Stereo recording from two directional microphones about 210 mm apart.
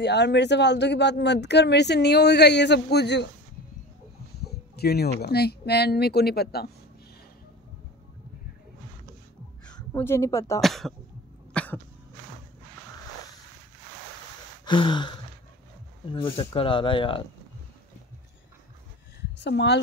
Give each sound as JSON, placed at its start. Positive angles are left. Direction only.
{"t": 0.0, "sound": "speech", "side_deg": 55}
{"t": 4.5, "sound": "a sound", "side_deg": 50}
{"t": 5.2, "sound": "speech", "side_deg": 50}
{"t": 9.8, "sound": "speech", "side_deg": 10}
{"t": 10.6, "sound": "speech", "side_deg": 0}
{"t": 11.5, "sound": "cough", "side_deg": 5}
{"t": 14.6, "sound": "a sound", "side_deg": 20}
{"t": 16.2, "sound": "speech", "side_deg": 25}
{"t": 19.4, "sound": "speech", "side_deg": 55}